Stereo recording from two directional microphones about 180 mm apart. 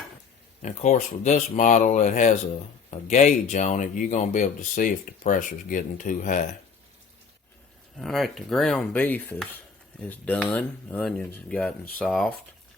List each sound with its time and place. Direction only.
0.6 s speech: 40° left (ahead or behind)
7.9 s speech: centre (ahead or behind)